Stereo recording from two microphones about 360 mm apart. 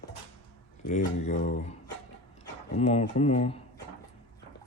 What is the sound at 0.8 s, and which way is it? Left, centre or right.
Speech, centre.